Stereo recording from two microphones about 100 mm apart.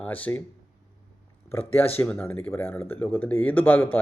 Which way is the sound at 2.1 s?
20° left (ahead or behind).